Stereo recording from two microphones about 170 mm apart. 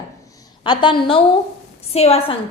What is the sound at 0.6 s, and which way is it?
A woman's voice, 30° left (ahead or behind).